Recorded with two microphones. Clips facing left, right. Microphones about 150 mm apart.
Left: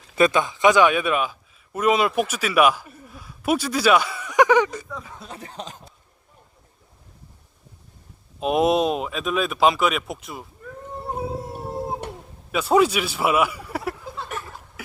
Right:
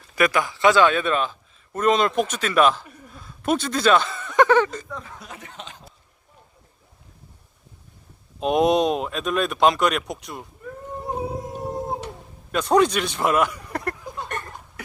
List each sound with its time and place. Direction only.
0.2 s a man's voice: 20° left (ahead or behind); by 5.2 s 5° left (ahead or behind)
5.2 s speech: 30° left (ahead or behind)
8.4 s speech: centre (ahead or behind)
12.5 s speech: 5° left (ahead or behind)
14.3 s a sound: 5° left (ahead or behind)